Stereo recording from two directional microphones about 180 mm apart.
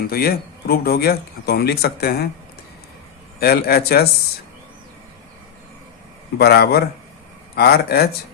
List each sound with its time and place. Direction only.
0.1 s speech: 55° left (ahead or behind)
3.4 s speech: 60° left (ahead or behind)
6.4 s speech: 60° left (ahead or behind)